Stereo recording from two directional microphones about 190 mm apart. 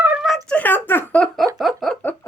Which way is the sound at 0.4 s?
10° left (ahead or behind).